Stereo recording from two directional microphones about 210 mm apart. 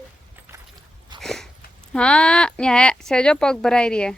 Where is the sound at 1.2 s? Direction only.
Centre (ahead or behind).